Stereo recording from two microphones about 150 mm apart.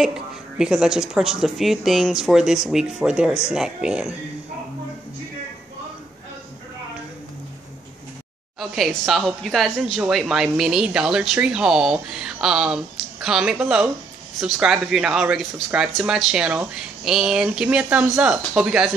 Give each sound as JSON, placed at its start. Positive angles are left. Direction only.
{"t": 0.0, "sound": "speech", "side_deg": -5}
{"t": 8.5, "sound": "speech", "side_deg": 0}